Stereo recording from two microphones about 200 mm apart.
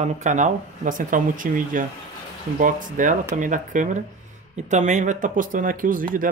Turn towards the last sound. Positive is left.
turn(degrees=-45)  # may be behind; listen again after turning